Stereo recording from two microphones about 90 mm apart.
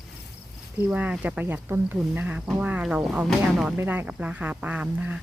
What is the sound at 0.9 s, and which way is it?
Speech, 15° right (ahead or behind).